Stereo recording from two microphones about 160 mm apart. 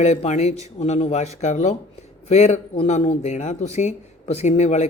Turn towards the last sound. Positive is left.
turn(degrees=45)  # may be behind; listen again after turning